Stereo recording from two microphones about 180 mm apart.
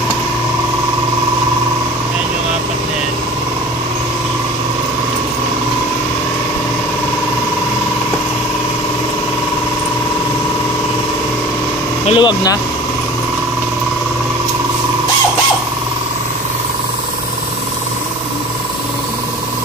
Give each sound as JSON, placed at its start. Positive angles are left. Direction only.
{"t": 12.1, "sound": "speech", "side_deg": 25}